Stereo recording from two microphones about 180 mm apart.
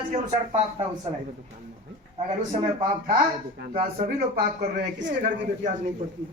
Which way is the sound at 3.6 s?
60° right (ahead or behind).